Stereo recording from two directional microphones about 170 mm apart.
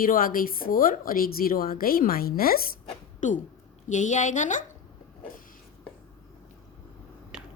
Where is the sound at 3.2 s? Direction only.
45° left (ahead or behind).